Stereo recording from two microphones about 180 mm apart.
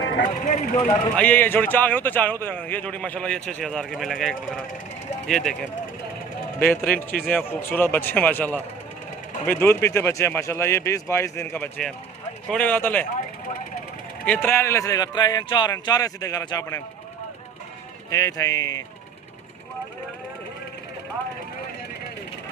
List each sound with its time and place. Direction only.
0.2 s speech: 45° left (ahead or behind)
1.1 s a man's voice: 5° left (ahead or behind)
14.3 s a man's voice: 10° left (ahead or behind)
18.1 s a man's voice: 20° left (ahead or behind)